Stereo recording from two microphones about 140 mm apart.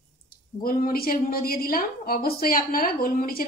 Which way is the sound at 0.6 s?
90° left.